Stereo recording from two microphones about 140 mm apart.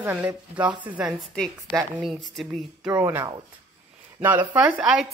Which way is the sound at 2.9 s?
15° right (ahead or behind).